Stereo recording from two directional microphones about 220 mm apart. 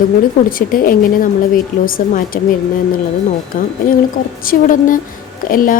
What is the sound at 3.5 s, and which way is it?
A woman's voice, 40° left (ahead or behind).